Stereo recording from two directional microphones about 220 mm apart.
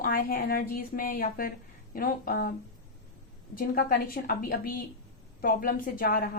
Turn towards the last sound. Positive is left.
turn(degrees=40)  # may be behind; listen again after turning